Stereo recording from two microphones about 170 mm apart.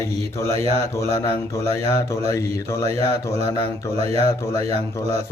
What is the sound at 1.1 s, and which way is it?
Speech, 15° left (ahead or behind).